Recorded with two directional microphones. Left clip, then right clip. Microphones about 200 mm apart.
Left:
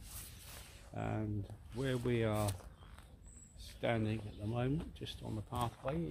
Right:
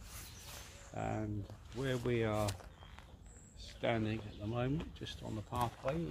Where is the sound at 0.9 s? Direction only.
50° left (ahead or behind).